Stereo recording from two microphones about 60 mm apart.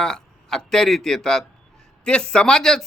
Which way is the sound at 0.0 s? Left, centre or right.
Centre.